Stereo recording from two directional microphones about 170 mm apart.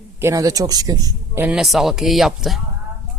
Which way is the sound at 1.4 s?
5° right (ahead or behind).